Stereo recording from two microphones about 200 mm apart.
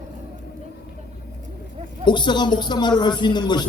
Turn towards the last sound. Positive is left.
turn(degrees=20)  # may be behind; listen again after turning